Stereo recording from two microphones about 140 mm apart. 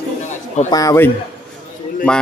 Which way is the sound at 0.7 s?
25° left (ahead or behind).